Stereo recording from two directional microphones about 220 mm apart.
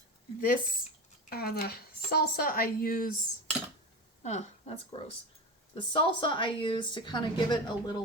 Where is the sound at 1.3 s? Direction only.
45° left (ahead or behind).